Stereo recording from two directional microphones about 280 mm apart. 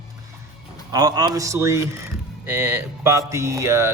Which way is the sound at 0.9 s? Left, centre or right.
Centre.